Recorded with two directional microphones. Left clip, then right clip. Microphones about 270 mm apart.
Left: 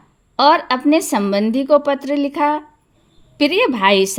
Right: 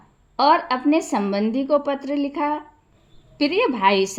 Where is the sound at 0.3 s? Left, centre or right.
Left.